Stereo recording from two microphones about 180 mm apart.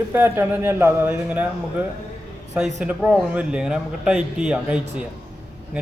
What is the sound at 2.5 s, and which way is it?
A man's voice, 5° right (ahead or behind).